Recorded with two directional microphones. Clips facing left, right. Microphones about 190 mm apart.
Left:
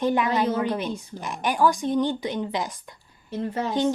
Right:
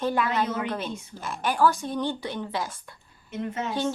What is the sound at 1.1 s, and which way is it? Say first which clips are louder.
A woman's voice: left 1 dB; 15° left (ahead or behind).